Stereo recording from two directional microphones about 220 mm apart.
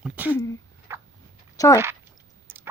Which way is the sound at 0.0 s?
5° right (ahead or behind).